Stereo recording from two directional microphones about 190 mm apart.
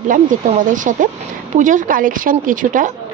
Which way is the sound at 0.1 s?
45° right (ahead or behind).